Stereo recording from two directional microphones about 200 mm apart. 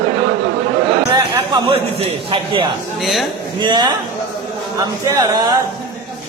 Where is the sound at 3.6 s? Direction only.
20° right (ahead or behind).